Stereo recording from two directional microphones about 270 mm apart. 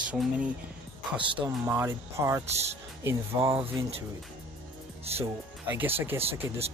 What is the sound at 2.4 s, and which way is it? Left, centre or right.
Speech, right.